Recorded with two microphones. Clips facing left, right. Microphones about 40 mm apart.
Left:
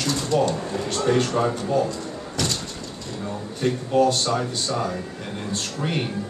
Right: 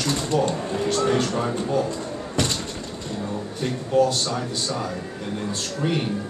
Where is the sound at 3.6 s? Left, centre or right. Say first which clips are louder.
Left 1 dB; centre.